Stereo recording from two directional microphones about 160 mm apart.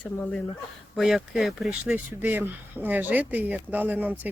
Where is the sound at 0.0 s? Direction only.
5° left (ahead or behind).